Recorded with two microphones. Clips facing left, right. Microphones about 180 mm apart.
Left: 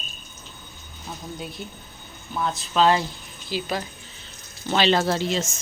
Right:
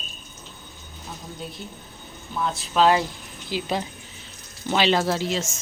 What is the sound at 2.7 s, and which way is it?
Speech, 10° right (ahead or behind).